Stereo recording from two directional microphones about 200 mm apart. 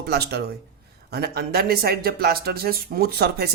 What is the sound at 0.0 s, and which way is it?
Speech, 55° right (ahead or behind).